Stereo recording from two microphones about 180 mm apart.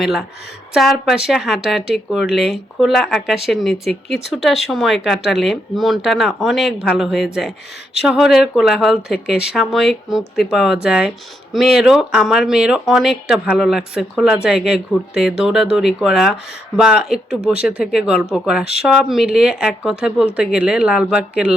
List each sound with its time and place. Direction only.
0.0 s speech: centre (ahead or behind)